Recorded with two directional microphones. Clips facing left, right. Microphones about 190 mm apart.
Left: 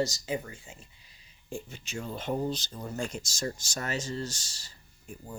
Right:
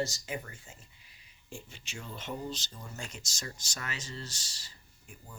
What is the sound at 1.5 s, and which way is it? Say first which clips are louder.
Speech: left 8 dB; 45° left (ahead or behind).